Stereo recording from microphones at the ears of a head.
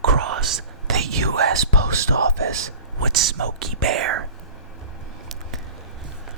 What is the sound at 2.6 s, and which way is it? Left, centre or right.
Speech, right.